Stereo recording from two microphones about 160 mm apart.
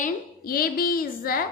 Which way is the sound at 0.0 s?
70° left (ahead or behind).